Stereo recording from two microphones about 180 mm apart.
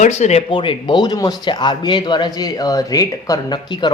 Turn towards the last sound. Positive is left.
turn(degrees=25)  # may be behind; listen again after turning